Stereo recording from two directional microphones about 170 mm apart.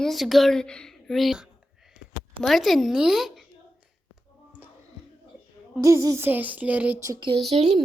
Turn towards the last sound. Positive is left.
turn(degrees=-40)  # may be behind; listen again after turning